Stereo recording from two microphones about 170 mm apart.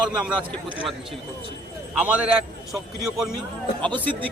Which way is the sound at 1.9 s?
5° right (ahead or behind).